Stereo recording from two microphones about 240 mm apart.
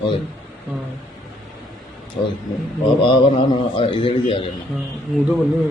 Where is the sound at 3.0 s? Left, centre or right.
Left.